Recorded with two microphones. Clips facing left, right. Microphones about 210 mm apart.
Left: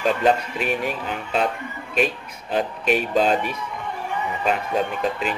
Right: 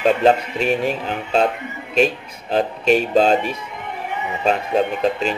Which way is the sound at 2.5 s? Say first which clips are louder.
Right 5 dB; 30° right (ahead or behind).